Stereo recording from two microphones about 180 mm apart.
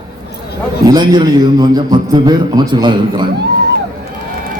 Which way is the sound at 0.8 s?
25° right (ahead or behind).